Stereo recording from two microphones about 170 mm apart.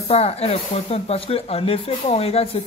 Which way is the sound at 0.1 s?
40° left (ahead or behind).